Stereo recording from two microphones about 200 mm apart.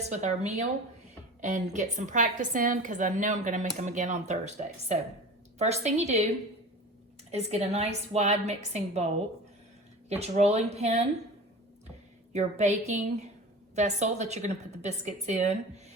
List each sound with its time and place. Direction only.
0.0 s a woman's voice: 35° right (ahead or behind)
7.3 s a woman's voice: 30° right (ahead or behind)
10.1 s a woman's voice: 35° right (ahead or behind)
12.3 s a woman's voice: 35° right (ahead or behind)